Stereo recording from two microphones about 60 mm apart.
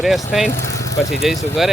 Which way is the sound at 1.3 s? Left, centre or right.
Centre.